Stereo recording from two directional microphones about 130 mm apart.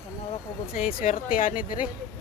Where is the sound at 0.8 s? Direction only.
90° left.